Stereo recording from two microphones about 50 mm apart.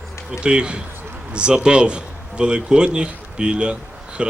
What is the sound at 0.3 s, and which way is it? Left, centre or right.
A man's voice, centre.